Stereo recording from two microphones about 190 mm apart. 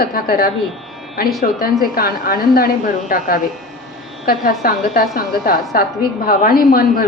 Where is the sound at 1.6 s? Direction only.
50° left (ahead or behind).